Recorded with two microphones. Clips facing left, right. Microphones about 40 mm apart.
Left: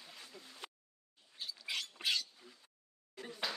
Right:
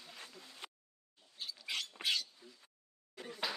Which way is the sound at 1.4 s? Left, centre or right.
Centre.